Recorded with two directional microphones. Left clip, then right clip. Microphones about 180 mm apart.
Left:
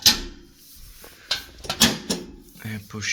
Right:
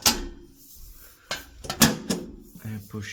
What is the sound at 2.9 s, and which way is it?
Speech, 15° right (ahead or behind).